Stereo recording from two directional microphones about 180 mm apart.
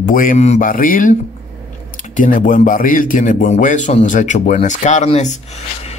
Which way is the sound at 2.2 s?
50° left (ahead or behind).